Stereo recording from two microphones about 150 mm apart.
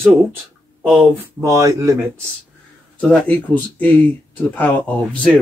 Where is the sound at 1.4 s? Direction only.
20° right (ahead or behind).